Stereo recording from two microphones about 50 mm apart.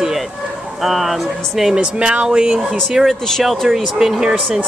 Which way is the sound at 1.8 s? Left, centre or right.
Right.